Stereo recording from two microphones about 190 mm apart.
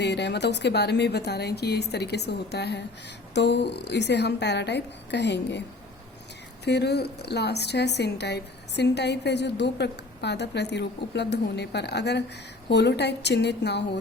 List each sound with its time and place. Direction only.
0.0 s a woman's voice: 65° left (ahead or behind)
6.7 s a woman's voice: 60° left (ahead or behind)